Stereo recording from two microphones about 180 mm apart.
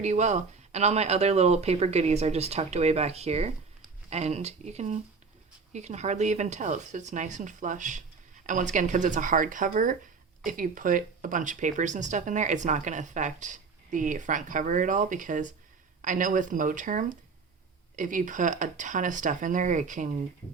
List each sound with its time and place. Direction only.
0.0 s speech: 40° right (ahead or behind)